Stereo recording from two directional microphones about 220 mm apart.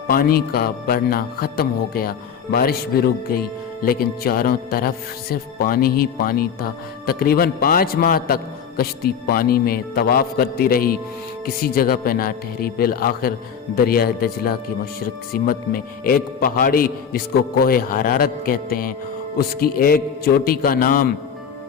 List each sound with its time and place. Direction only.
0.1 s a man's voice: 40° left (ahead or behind)